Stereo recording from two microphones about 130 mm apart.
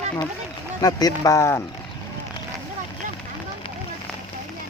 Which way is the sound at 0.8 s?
25° left (ahead or behind).